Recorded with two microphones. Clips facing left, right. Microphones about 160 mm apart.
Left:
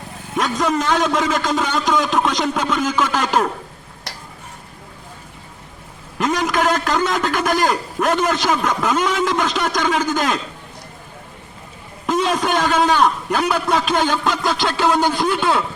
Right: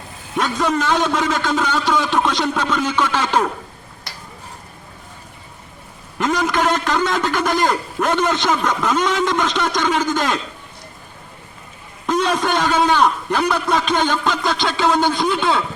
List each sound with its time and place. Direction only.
0.3 s a man's voice: centre (ahead or behind)
4.1 s tick-tock: 85° left
6.1 s a man's voice: centre (ahead or behind)
12.0 s a man's voice: 5° left (ahead or behind)